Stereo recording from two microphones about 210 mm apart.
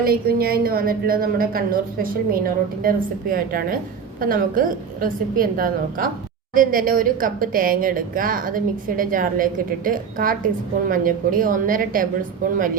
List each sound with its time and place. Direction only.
0.1 s a woman's voice: 45° right (ahead or behind)